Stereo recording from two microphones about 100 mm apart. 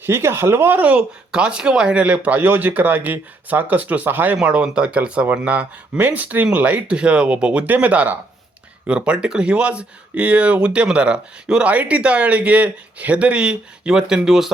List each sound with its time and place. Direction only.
0.0 s speech: 25° right (ahead or behind); by 14.5 s 5° right (ahead or behind)